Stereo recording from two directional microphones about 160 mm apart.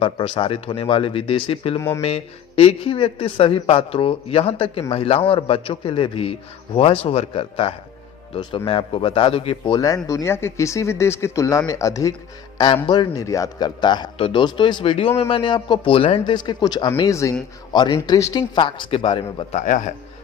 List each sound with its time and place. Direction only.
0.0 s a man's voice: 30° left (ahead or behind)
19.5 s speech: 50° left (ahead or behind)